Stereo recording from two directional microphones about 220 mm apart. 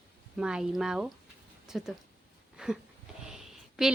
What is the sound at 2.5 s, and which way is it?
Wheeze, 5° right (ahead or behind).